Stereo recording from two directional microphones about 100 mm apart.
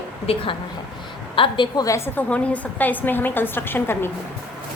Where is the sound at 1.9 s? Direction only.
25° left (ahead or behind).